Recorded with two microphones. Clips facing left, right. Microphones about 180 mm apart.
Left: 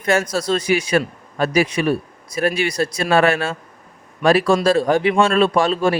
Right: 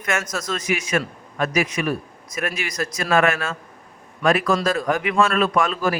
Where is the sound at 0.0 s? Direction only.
30° left (ahead or behind).